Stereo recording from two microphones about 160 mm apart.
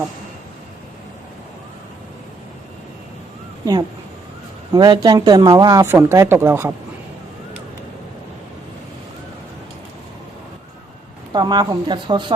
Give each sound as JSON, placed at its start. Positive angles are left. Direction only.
{"t": 4.7, "sound": "speech", "side_deg": -25}
{"t": 11.3, "sound": "speech", "side_deg": -25}